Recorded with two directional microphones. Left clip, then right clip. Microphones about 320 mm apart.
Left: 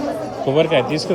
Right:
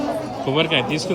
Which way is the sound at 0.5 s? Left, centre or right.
Centre.